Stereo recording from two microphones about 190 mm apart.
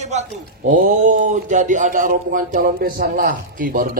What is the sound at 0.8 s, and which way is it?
A woman's voice, 40° right (ahead or behind).